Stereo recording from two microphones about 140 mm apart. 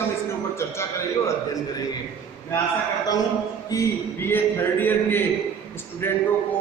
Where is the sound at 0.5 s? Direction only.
20° left (ahead or behind).